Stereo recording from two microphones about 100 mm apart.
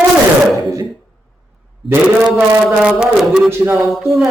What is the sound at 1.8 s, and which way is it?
Speech, centre (ahead or behind).